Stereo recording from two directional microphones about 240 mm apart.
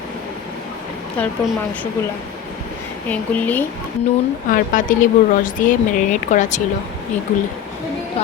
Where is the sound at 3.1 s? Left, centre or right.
Centre.